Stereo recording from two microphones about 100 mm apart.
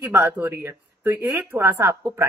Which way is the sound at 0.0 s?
20° right (ahead or behind).